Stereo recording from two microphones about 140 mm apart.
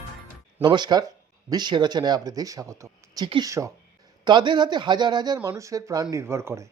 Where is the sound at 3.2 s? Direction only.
35° right (ahead or behind); by 6.6 s 20° right (ahead or behind).